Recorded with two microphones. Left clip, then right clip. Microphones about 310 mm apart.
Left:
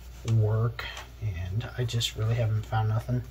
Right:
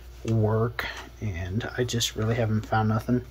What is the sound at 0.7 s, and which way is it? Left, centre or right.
Speech, centre.